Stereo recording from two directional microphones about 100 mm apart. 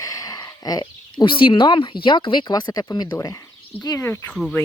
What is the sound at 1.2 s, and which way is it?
Speech, 55° left (ahead or behind).